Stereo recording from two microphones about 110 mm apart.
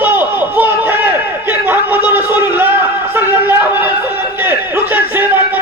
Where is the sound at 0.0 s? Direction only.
15° right (ahead or behind).